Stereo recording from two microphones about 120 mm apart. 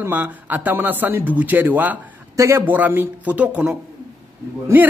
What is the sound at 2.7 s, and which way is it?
Speech, 15° right (ahead or behind).